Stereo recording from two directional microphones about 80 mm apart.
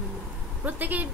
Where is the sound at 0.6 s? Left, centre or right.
Right.